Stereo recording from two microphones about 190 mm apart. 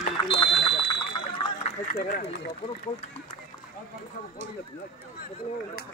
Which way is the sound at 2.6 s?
60° left (ahead or behind).